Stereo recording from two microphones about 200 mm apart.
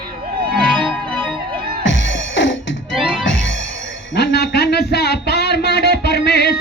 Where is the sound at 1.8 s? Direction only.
70° left (ahead or behind).